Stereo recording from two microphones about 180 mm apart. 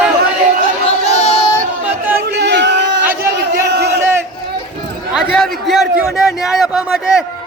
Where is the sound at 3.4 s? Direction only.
70° right (ahead or behind).